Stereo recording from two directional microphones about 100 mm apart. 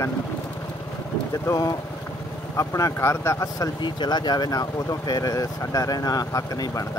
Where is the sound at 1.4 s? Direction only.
35° left (ahead or behind).